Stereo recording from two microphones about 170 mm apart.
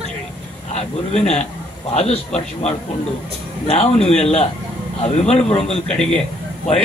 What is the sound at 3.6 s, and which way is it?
A man's voice, 40° left (ahead or behind).